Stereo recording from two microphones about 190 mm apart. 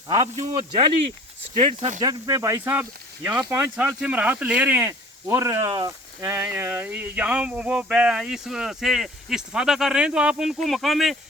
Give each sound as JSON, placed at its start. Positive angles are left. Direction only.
{"t": 0.3, "sound": "speech", "side_deg": -25}
{"t": 2.0, "sound": "speech", "side_deg": -20}